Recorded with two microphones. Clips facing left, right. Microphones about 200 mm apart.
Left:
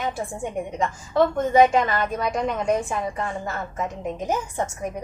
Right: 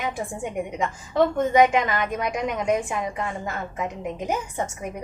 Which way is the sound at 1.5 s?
15° right (ahead or behind).